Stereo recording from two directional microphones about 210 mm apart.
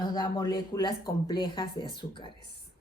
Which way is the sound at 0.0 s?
20° left (ahead or behind).